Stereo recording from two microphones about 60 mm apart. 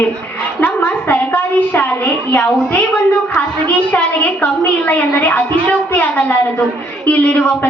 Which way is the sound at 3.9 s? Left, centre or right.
Left.